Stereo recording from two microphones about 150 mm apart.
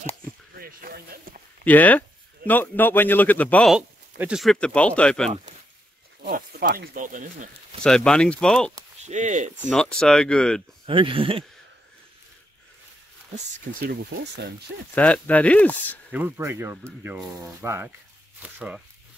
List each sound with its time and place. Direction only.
0.6 s a sound: 75° right (ahead or behind)
1.6 s speech: 10° left (ahead or behind)
3.7 s speech: 5° right (ahead or behind)
6.2 s speech: 90° right; by 7.4 s 60° right (ahead or behind)
7.8 s speech: 5° left (ahead or behind)
9.0 s speech: 55° right (ahead or behind)
9.6 s speech: centre (ahead or behind)
10.9 s speech: 35° right (ahead or behind)
13.3 s speech: 70° right (ahead or behind)
15.0 s speech: 10° left (ahead or behind)
16.1 s speech: 15° right (ahead or behind)